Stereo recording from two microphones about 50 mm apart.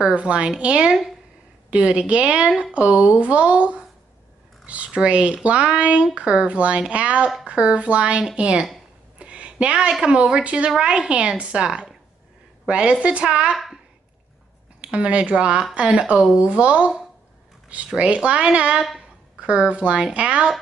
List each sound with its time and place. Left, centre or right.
0.1 s speech: right
9.2 s a sound: right
10.0 s speech: right
14.8 s speech: right
17.9 s a woman's voice: right